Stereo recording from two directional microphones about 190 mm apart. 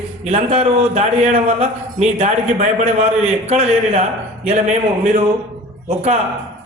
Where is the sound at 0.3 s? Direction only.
35° right (ahead or behind).